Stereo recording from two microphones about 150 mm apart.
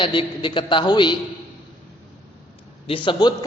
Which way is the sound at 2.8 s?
35° left (ahead or behind).